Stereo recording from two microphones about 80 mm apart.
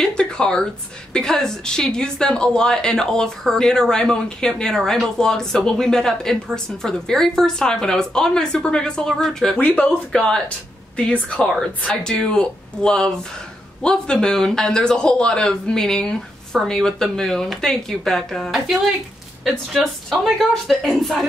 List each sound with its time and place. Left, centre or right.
0.0 s speech: centre
9.6 s speech: centre
10.1 s speech: centre